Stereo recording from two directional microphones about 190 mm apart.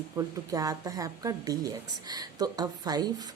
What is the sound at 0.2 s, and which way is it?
A woman's voice, 20° right (ahead or behind).